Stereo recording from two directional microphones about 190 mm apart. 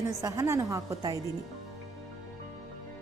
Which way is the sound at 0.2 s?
15° right (ahead or behind).